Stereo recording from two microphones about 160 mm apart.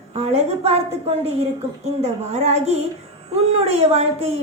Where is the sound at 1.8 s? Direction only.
45° right (ahead or behind).